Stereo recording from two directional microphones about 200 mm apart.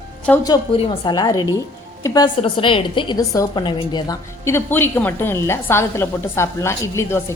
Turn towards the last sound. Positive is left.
turn(degrees=15)  # may be behind; listen again after turning